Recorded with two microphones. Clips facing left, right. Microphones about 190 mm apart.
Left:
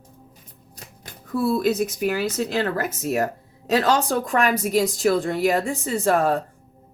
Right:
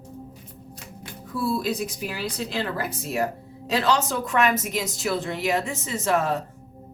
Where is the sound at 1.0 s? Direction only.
50° left (ahead or behind).